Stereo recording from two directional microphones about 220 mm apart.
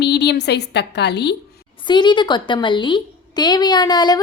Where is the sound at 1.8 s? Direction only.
20° left (ahead or behind).